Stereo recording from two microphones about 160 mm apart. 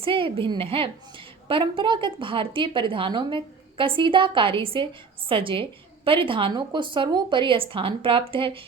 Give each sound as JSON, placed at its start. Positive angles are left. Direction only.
{"t": 0.0, "sound": "a woman's voice", "side_deg": -35}